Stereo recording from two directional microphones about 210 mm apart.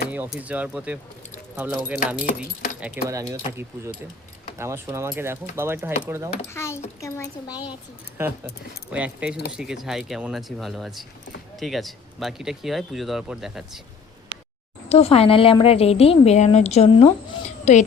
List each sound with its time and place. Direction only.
0.1 s speech: 5° right (ahead or behind)
2.2 s speech: 40° left (ahead or behind)
2.8 s speech: 10° right (ahead or behind)
4.5 s speech: 10° right (ahead or behind)
6.5 s a woman's voice: 10° left (ahead or behind)
8.2 s speech: 10° right (ahead or behind)
14.8 s a woman's voice: 30° left (ahead or behind)